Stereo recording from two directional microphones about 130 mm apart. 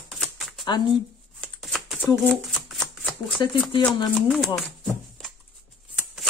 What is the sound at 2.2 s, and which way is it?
Shuffling cards, 5° left (ahead or behind).